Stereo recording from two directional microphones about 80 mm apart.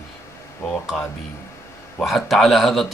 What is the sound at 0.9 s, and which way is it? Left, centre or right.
A man's voice, centre.